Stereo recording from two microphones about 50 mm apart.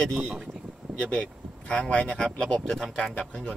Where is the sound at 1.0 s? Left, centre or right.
Left.